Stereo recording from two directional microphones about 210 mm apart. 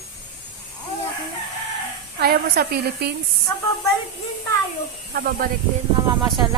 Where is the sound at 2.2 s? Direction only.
45° right (ahead or behind).